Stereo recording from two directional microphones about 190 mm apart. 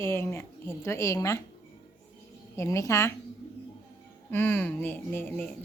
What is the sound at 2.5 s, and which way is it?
Speech, 15° left (ahead or behind).